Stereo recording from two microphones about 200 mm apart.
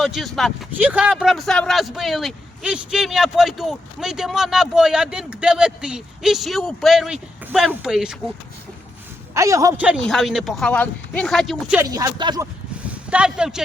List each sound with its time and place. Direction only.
0.0 s speech: centre (ahead or behind)
9.3 s speech: 15° right (ahead or behind); by 11.8 s centre (ahead or behind)
11.8 s speech: 15° right (ahead or behind)
12.9 s speech: 5° right (ahead or behind)